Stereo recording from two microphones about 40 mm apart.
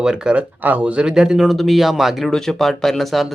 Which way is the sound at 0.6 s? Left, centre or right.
Right.